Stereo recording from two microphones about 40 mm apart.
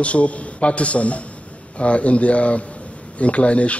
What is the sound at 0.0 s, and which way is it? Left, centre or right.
A man's voice, left.